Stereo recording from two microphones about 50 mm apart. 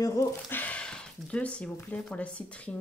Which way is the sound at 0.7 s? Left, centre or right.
Centre.